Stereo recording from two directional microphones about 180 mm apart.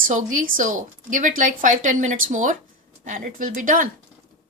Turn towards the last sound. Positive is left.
turn(degrees=-45)  # may be behind; listen again after turning